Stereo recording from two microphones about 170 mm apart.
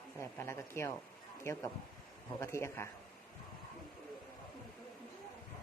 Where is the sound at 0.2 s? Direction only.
15° left (ahead or behind).